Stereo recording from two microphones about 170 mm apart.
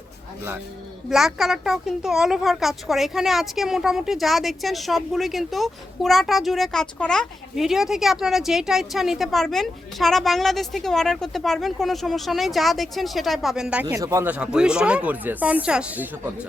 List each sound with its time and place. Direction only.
1.1 s a woman's voice: centre (ahead or behind)
13.8 s speech: 20° right (ahead or behind)
14.3 s speech: 5° right (ahead or behind)